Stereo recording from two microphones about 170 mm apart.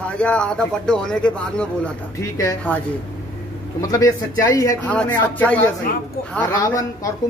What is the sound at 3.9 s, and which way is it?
Speech, 20° left (ahead or behind).